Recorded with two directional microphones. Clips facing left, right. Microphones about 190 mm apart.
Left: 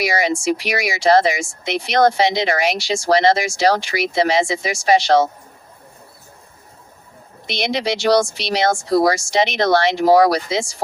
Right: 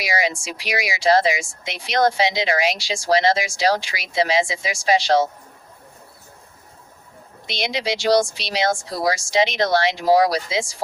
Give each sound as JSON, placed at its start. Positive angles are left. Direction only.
{"t": 0.0, "sound": "speech", "side_deg": 65}
{"t": 7.4, "sound": "speech", "side_deg": 60}